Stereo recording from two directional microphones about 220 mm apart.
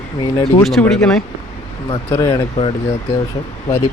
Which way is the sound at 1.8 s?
20° left (ahead or behind).